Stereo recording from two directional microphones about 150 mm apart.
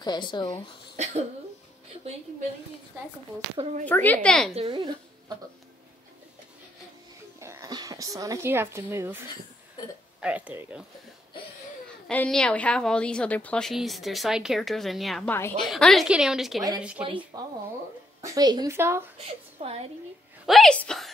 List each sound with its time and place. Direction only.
0.0 s speech: 30° left (ahead or behind)
0.9 s speech: 50° right (ahead or behind)
3.8 s a woman's voice: 10° left (ahead or behind)
4.6 s speech: 35° right (ahead or behind)
7.3 s speech: 20° right (ahead or behind)
10.2 s speech: 10° right (ahead or behind)
12.1 s a woman's voice: 5° left (ahead or behind)
15.2 s a woman's voice: 15° left (ahead or behind)
15.6 s a woman's voice: centre (ahead or behind)
18.2 s a woman's voice: 25° right (ahead or behind)
19.6 s a woman's voice: 45° right (ahead or behind)
20.4 s a woman's voice: centre (ahead or behind)